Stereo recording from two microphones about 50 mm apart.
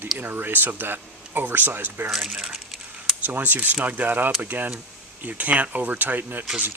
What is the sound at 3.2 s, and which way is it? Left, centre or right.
Speech, right.